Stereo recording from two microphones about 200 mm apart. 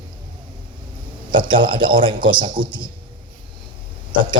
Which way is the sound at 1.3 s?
25° right (ahead or behind).